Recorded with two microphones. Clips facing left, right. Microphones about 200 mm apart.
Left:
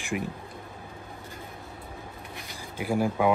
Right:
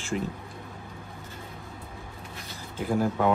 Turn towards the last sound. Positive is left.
turn(degrees=10)  # may be behind; listen again after turning